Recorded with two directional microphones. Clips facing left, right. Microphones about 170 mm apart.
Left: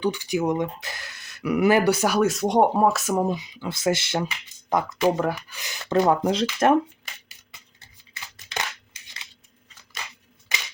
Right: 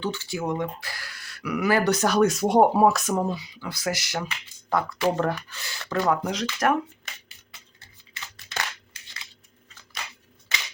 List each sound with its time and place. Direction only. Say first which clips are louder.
0.0 s speech: left 5 dB; 15° left (ahead or behind)
1.8 s speech: even; 10° left (ahead or behind)
3.1 s speech: left 2 dB; 15° left (ahead or behind)